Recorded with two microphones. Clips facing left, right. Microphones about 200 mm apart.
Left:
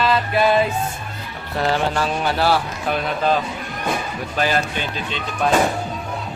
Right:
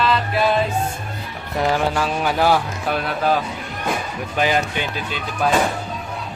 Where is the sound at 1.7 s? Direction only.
10° right (ahead or behind).